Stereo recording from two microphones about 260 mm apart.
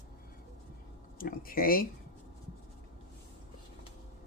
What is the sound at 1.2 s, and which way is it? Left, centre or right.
Speech, left.